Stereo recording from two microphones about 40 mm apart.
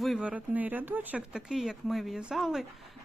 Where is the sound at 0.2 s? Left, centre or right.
Right.